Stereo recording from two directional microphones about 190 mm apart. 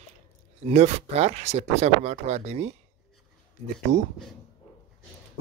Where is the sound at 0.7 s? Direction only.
35° right (ahead or behind).